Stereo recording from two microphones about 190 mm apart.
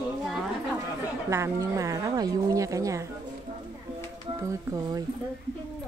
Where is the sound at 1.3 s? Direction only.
15° right (ahead or behind).